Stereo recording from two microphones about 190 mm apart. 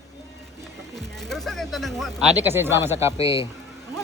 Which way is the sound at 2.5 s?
10° right (ahead or behind).